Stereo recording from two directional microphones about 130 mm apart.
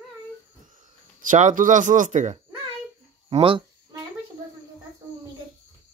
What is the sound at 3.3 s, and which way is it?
Speech, 45° right (ahead or behind).